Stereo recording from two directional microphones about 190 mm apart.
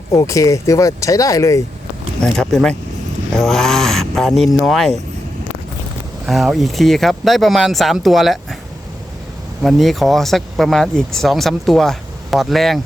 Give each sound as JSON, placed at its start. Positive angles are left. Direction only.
{"t": 0.1, "sound": "speech", "side_deg": 15}
{"t": 2.2, "sound": "speech", "side_deg": 0}
{"t": 6.2, "sound": "speech", "side_deg": 0}
{"t": 9.6, "sound": "speech", "side_deg": 0}